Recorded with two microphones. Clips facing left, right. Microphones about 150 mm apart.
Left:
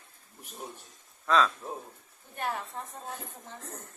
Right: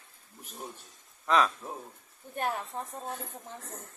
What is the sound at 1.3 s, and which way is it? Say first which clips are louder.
Speech: even; 15° right (ahead or behind).